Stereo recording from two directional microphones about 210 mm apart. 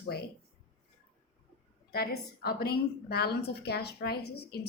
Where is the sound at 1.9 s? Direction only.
45° left (ahead or behind).